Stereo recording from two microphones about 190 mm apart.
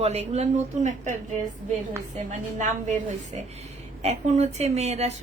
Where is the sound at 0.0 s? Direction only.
35° right (ahead or behind).